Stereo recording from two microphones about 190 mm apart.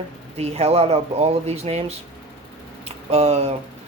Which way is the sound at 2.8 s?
35° right (ahead or behind).